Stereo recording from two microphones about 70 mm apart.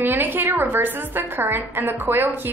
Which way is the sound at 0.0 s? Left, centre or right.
Right.